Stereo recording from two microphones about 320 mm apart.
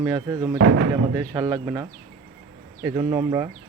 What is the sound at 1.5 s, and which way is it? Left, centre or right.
Speech, centre.